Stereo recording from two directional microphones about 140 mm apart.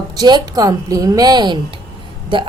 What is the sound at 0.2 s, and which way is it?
A woman's voice, 30° right (ahead or behind).